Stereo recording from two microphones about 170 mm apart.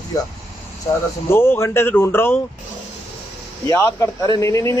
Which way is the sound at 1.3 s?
15° left (ahead or behind).